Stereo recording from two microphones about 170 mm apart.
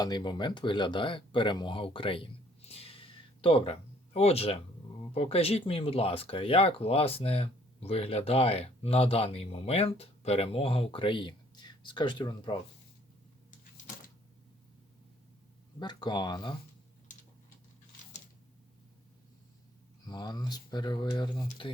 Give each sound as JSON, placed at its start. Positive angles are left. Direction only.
{"t": 0.0, "sound": "speech", "side_deg": 25}
{"t": 15.8, "sound": "speech", "side_deg": 25}
{"t": 20.1, "sound": "speech", "side_deg": 25}